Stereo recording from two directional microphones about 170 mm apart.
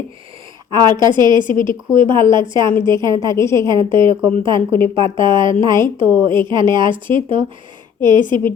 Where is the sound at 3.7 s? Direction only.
30° right (ahead or behind).